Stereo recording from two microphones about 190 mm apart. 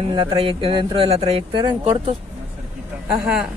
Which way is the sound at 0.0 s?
30° right (ahead or behind).